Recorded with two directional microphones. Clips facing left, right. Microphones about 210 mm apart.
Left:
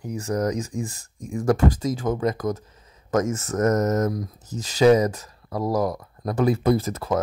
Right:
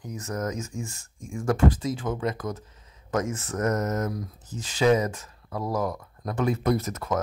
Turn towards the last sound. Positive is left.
turn(degrees=30)  # may be behind; listen again after turning